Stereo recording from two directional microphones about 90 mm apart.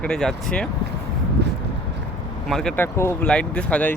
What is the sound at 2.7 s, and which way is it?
Speech, 25° left (ahead or behind).